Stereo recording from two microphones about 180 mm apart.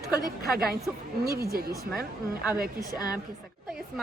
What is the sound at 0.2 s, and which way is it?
Speech, 55° right (ahead or behind).